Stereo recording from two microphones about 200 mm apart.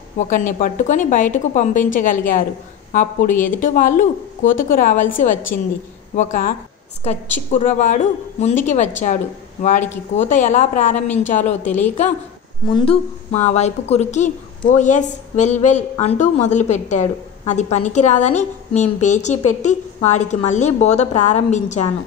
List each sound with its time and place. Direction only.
0.3 s a woman's voice: 40° left (ahead or behind)
12.7 s a woman's voice: 30° left (ahead or behind)